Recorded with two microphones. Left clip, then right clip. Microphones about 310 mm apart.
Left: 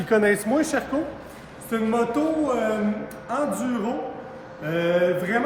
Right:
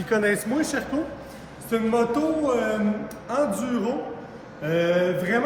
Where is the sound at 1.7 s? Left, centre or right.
Centre.